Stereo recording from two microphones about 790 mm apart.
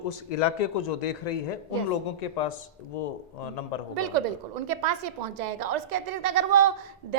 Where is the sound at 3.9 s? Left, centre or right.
Right.